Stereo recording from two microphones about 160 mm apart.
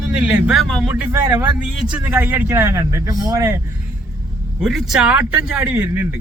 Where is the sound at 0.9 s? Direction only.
10° right (ahead or behind).